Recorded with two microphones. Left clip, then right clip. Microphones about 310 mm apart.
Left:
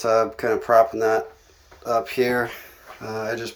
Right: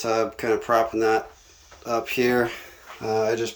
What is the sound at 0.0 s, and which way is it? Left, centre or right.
Speech, centre.